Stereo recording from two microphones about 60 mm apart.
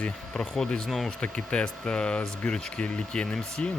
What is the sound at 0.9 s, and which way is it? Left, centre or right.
Speech, centre.